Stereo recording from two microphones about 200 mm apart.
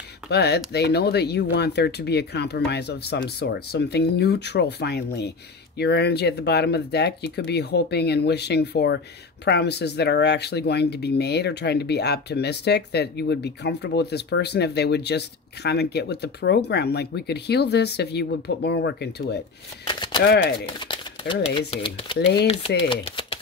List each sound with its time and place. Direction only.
0.3 s speech: 55° left (ahead or behind)
19.9 s a sound: 25° left (ahead or behind)
20.6 s speech: 25° left (ahead or behind)